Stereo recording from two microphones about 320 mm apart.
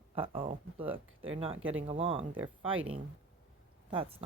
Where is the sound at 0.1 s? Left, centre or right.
Centre.